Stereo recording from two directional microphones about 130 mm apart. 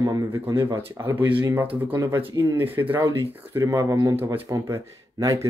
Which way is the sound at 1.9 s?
25° right (ahead or behind).